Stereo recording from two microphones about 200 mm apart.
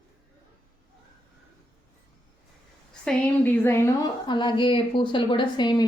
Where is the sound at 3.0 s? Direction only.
10° left (ahead or behind).